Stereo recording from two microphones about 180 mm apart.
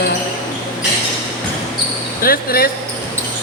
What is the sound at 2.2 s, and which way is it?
Speech, 55° left (ahead or behind).